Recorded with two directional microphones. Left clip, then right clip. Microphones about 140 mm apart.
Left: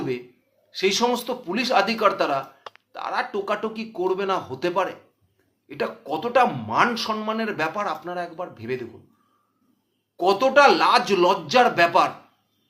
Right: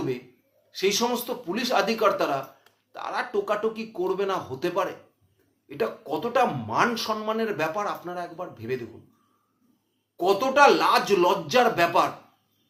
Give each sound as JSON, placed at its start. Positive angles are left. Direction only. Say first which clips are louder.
{"t": 0.7, "sound": "speech", "louder": "left 3 dB", "side_deg": 20}
{"t": 10.2, "sound": "speech", "louder": "left 3 dB", "side_deg": 20}